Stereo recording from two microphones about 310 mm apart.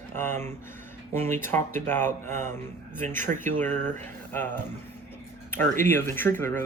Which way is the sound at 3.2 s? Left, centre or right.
Right.